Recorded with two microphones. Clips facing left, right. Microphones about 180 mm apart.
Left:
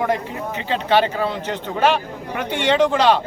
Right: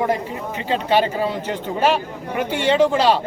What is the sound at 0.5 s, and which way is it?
Speech, 40° right (ahead or behind).